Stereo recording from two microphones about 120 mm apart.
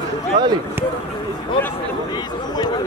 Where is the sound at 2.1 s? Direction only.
35° left (ahead or behind).